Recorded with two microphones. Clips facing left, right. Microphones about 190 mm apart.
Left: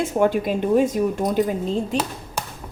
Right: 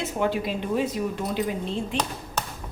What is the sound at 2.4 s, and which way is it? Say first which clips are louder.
Tap: left 1 dB; 10° left (ahead or behind).